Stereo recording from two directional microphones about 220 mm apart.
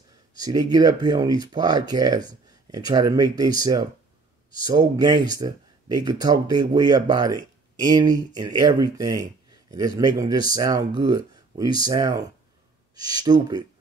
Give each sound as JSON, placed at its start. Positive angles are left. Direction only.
{"t": 0.4, "sound": "speech", "side_deg": -15}